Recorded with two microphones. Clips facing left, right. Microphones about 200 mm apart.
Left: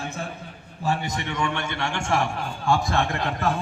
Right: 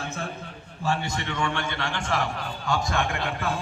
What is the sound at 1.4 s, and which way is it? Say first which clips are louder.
A man's voice: left 2 dB; 25° left (ahead or behind).